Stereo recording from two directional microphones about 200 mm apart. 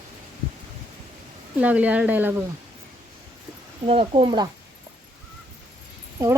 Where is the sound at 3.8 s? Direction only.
25° right (ahead or behind).